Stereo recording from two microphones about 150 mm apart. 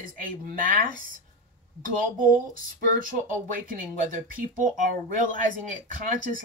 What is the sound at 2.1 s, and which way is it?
Speech, 65° right (ahead or behind).